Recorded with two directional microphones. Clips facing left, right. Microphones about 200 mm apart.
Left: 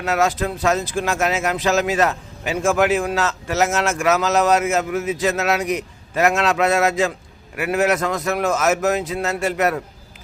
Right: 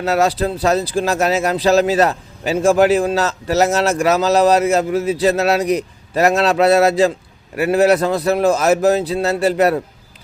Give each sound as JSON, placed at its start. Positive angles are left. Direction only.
{"t": 0.0, "sound": "speech", "side_deg": -35}